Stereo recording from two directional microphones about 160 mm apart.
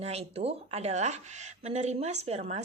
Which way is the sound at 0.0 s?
40° right (ahead or behind).